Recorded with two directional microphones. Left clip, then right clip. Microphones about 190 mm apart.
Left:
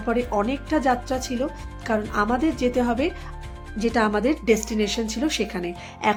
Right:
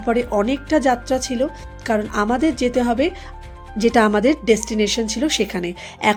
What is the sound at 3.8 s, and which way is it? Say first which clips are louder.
Speech: right 6 dB; 25° right (ahead or behind).